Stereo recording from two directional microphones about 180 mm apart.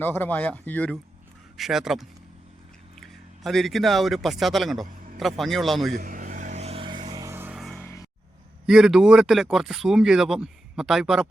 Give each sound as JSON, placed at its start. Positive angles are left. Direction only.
{"t": 0.0, "sound": "speech", "side_deg": 10}
{"t": 1.5, "sound": "a man's voice", "side_deg": 0}
{"t": 5.9, "sound": "vehicle", "side_deg": -50}
{"t": 8.6, "sound": "speech", "side_deg": -5}